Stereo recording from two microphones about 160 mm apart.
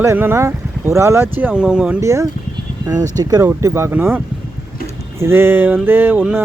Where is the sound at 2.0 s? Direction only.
20° right (ahead or behind).